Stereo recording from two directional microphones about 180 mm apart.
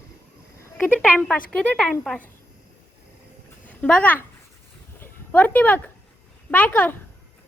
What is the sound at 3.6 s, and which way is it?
Speech, 10° left (ahead or behind).